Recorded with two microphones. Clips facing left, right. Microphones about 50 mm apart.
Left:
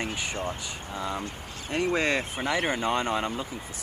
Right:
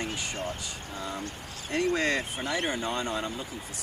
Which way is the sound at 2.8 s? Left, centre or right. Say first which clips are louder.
Left 4 dB; left.